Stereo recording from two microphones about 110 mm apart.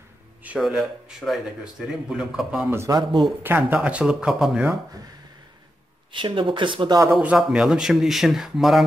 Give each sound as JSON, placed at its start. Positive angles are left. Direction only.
{"t": 0.6, "sound": "speech", "side_deg": -5}
{"t": 2.9, "sound": "speech", "side_deg": -40}
{"t": 3.4, "sound": "speech", "side_deg": -15}
{"t": 6.1, "sound": "speech", "side_deg": -50}
{"t": 7.2, "sound": "speech", "side_deg": -10}